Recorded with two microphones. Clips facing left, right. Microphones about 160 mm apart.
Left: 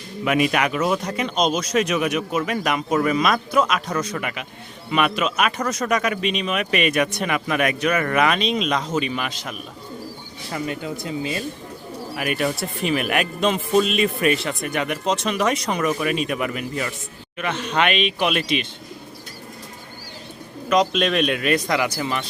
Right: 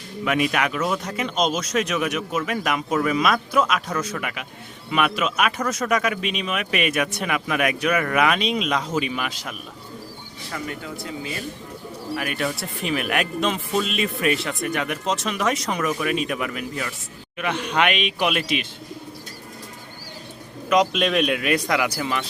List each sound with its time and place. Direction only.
0.3 s speech: centre (ahead or behind)
10.5 s speech: 20° left (ahead or behind)
12.1 s speech: 5° left (ahead or behind)
17.3 s a man's voice: 10° right (ahead or behind)
20.7 s a man's voice: 10° right (ahead or behind)